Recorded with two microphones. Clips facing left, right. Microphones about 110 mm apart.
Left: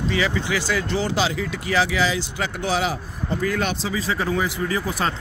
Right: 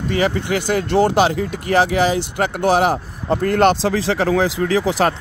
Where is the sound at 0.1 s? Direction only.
50° right (ahead or behind).